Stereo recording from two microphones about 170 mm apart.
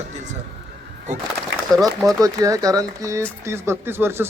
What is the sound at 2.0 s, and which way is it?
A man's voice, 20° right (ahead or behind).